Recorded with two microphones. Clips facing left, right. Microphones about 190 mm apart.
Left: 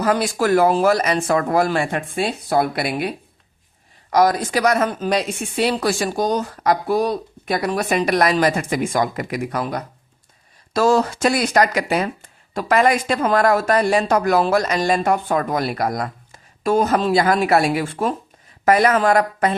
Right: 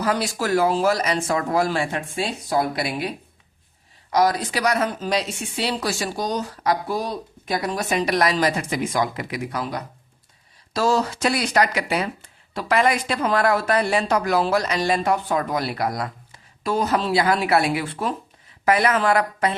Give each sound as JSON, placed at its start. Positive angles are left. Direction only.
{"t": 0.0, "sound": "speech", "side_deg": 50}
{"t": 4.1, "sound": "speech", "side_deg": 50}